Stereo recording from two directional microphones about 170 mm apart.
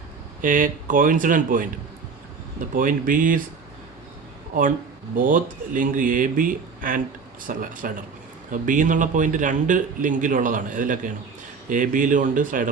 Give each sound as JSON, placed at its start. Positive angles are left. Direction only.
{"t": 0.4, "sound": "a man's voice", "side_deg": -50}
{"t": 4.5, "sound": "a man's voice", "side_deg": -50}